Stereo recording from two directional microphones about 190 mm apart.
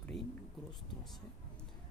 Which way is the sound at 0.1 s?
65° left (ahead or behind).